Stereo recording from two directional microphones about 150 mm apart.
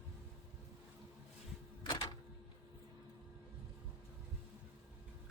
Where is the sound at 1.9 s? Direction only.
30° left (ahead or behind).